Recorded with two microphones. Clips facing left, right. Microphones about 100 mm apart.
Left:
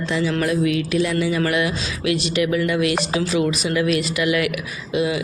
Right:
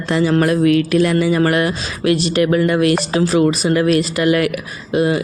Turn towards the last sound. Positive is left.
turn(degrees=-50)  # may be behind; listen again after turning